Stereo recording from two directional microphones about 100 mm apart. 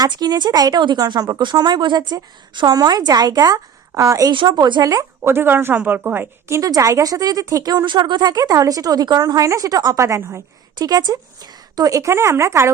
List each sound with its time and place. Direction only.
0.0 s a woman's voice: 40° right (ahead or behind)
4.3 s speech: 45° right (ahead or behind)
5.3 s a woman's voice: 20° right (ahead or behind)
6.6 s a woman's voice: 35° right (ahead or behind)
10.8 s a woman's voice: 45° right (ahead or behind)